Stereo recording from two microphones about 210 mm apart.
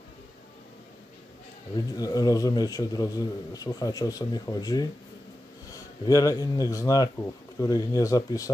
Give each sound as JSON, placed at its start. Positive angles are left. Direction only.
{"t": 2.0, "sound": "a man's voice", "side_deg": 15}